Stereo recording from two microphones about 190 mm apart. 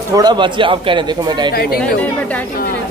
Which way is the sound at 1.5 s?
55° left (ahead or behind).